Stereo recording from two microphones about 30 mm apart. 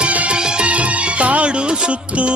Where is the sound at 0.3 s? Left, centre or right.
Right.